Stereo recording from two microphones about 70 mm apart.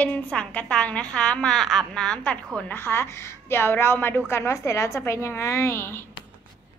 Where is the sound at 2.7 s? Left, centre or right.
Left.